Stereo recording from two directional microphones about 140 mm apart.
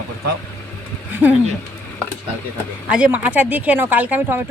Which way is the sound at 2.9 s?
10° right (ahead or behind).